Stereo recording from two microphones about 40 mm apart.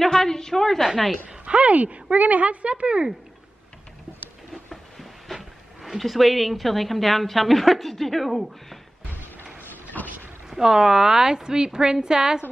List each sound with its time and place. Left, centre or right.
0.0 s a woman's voice: centre
1.4 s speech: right
4.9 s a sound: centre
5.9 s a woman's voice: centre
9.6 s a sound: left
10.5 s a woman's voice: centre